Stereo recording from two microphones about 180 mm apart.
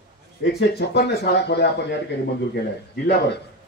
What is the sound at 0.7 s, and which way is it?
Speech, 65° left (ahead or behind).